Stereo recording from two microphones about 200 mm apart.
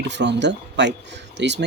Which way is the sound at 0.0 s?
60° right (ahead or behind).